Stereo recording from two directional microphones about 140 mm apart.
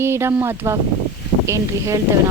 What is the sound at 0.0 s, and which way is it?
Speech, 20° right (ahead or behind).